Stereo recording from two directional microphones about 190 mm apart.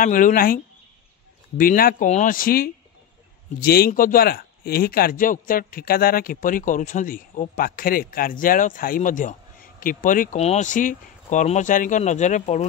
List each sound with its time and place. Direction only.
0.0 s speech: 45° left (ahead or behind)
1.6 s speech: 50° left (ahead or behind)